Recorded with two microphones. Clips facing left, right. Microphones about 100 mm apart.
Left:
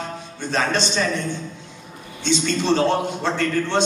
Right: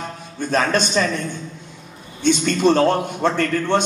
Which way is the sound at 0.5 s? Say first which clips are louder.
Right 3 dB; 50° right (ahead or behind).